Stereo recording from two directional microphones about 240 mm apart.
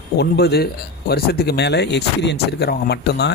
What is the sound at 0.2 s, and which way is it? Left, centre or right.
Speech, left.